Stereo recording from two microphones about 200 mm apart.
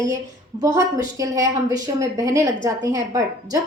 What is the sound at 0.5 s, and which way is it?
A woman's voice, 15° right (ahead or behind).